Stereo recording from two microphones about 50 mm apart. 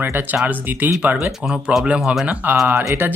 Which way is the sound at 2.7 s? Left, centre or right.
Right.